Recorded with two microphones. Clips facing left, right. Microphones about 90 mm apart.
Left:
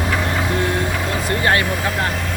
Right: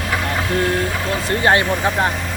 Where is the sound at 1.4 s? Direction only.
25° right (ahead or behind).